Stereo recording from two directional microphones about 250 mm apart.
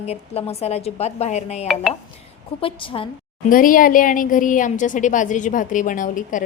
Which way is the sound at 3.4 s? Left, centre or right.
Left.